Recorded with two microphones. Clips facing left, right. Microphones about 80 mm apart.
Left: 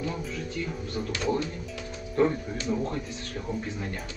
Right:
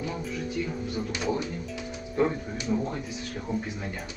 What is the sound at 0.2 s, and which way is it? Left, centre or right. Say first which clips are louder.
Music: right 2 dB; centre.